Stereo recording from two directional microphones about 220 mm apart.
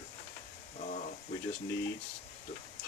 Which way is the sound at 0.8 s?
35° left (ahead or behind).